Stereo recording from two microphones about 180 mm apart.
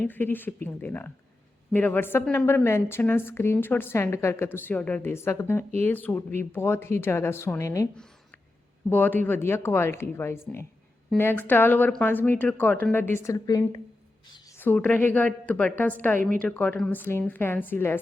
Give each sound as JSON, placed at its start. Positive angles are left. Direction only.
{"t": 0.0, "sound": "a woman's voice", "side_deg": 10}
{"t": 8.9, "sound": "a woman's voice", "side_deg": 10}
{"t": 14.3, "sound": "a sound", "side_deg": 25}
{"t": 14.6, "sound": "a woman's voice", "side_deg": 10}